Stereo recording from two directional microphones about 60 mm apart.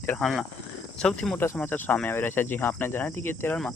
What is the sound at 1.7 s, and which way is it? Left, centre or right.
Speech, left.